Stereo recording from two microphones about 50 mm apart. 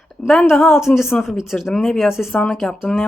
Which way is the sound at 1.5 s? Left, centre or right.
Centre.